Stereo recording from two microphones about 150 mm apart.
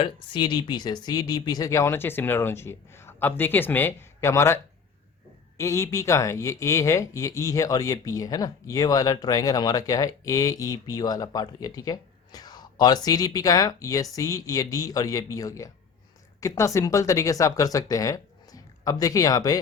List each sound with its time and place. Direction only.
0.0 s speech: 30° left (ahead or behind)